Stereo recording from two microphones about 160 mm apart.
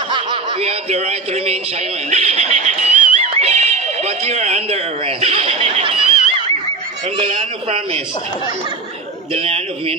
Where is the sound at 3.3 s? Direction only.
45° right (ahead or behind).